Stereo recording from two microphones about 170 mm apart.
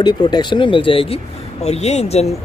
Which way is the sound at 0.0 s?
25° left (ahead or behind).